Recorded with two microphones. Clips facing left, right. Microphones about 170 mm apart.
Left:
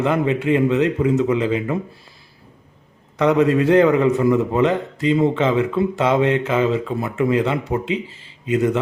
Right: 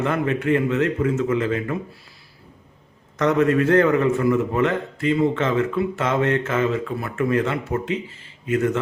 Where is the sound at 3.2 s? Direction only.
15° left (ahead or behind).